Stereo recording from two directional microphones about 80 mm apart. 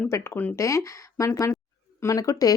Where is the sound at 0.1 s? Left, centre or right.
Left.